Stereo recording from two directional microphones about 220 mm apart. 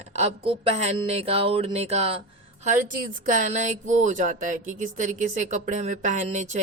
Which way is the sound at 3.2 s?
35° right (ahead or behind).